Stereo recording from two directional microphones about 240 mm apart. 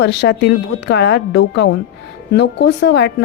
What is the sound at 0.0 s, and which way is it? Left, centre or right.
A woman's voice, left.